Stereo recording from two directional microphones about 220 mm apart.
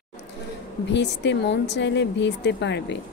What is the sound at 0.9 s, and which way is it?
Speech, 55° left (ahead or behind).